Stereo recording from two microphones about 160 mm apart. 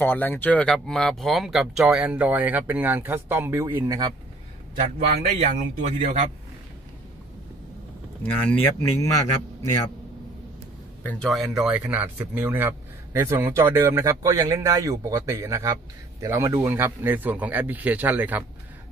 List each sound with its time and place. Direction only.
0.0 s speech: 10° left (ahead or behind); by 4.1 s 20° right (ahead or behind)
5.9 s a man's voice: 40° right (ahead or behind)
8.2 s a man's voice: 10° left (ahead or behind)
11.0 s speech: 10° left (ahead or behind); by 18.4 s 10° right (ahead or behind)